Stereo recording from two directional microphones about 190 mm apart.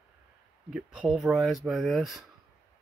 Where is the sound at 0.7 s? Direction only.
Centre (ahead or behind).